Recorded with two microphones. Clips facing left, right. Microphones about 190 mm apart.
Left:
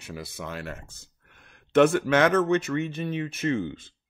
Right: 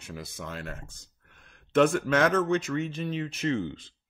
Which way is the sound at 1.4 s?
70° left (ahead or behind).